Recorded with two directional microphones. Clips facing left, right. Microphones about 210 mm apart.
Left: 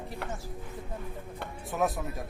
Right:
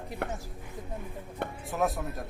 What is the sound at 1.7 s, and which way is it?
Speech, centre (ahead or behind).